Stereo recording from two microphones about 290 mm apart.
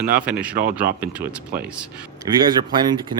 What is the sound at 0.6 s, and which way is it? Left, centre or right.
Speech, right.